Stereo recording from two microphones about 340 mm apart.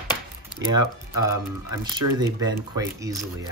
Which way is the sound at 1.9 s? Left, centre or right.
Centre.